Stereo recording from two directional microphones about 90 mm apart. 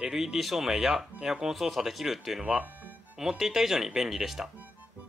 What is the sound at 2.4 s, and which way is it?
Speech, 15° right (ahead or behind).